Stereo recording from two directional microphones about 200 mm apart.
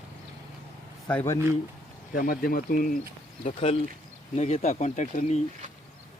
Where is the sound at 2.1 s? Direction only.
45° left (ahead or behind).